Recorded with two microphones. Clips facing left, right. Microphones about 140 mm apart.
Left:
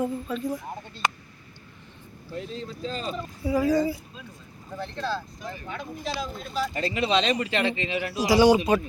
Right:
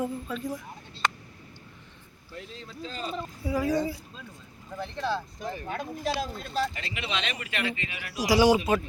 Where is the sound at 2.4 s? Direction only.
25° left (ahead or behind).